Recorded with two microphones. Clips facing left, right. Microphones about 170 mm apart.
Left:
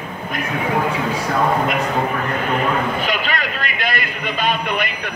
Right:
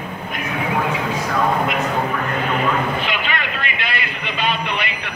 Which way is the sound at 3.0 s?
40° left (ahead or behind).